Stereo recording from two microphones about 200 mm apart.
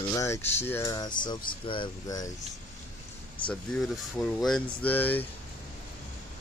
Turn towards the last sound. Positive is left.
turn(degrees=10)  # may be behind; listen again after turning